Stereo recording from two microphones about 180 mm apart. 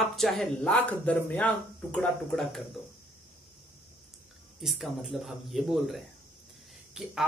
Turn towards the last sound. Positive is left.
turn(degrees=0)  # may be behind; listen again after turning